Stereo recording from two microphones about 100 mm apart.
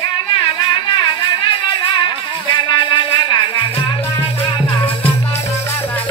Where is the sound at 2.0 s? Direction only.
50° left (ahead or behind).